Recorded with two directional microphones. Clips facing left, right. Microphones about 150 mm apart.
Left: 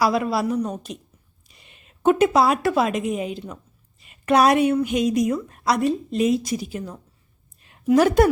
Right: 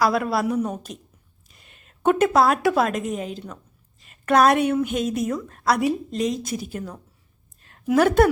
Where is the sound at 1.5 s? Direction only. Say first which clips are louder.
Left 1 dB; centre (ahead or behind).